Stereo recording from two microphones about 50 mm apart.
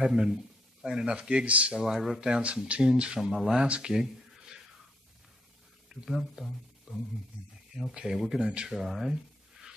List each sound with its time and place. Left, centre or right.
0.0 s speech: centre
1.8 s speech: centre
3.6 s speech: right
3.9 s a sound: centre
5.9 s speech: centre
8.6 s a sound: centre